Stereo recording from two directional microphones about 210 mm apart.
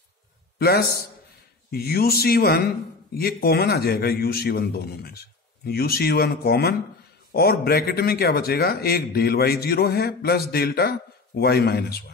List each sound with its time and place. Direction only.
0.6 s a man's voice: 50° left (ahead or behind)